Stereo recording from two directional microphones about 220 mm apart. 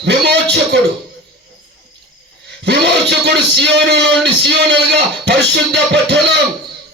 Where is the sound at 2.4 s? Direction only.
50° right (ahead or behind).